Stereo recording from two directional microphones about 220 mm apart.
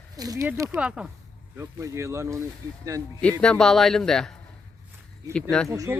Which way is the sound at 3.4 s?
5° left (ahead or behind).